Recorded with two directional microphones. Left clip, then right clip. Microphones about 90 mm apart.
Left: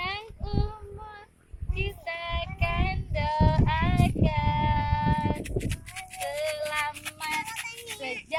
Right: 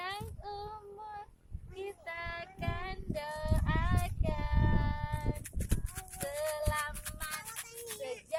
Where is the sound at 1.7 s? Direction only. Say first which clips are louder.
Left 8 dB; 45° right (ahead or behind).